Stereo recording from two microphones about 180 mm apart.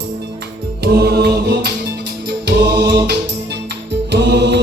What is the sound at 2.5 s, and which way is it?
Music, 70° right (ahead or behind).